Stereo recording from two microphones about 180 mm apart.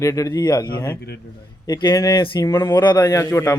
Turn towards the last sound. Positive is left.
turn(degrees=15)  # may be behind; listen again after turning